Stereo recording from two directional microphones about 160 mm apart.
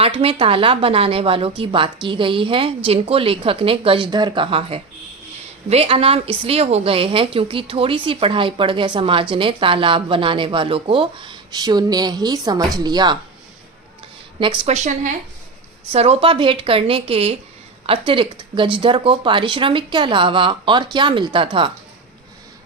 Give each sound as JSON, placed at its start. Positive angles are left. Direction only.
{"t": 0.0, "sound": "a woman's voice", "side_deg": -35}
{"t": 14.3, "sound": "a woman's voice", "side_deg": -30}
{"t": 14.8, "sound": "a woman's voice", "side_deg": -50}
{"t": 15.9, "sound": "a woman's voice", "side_deg": -40}